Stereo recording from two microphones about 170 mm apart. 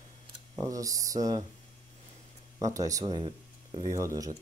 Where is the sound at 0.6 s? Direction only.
20° right (ahead or behind).